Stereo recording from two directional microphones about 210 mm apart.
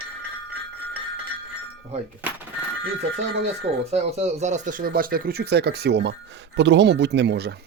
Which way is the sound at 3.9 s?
30° right (ahead or behind).